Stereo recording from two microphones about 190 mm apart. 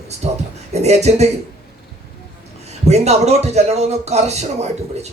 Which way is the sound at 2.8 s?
35° right (ahead or behind).